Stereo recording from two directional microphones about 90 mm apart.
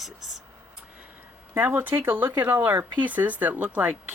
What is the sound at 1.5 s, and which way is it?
Speech, 25° right (ahead or behind).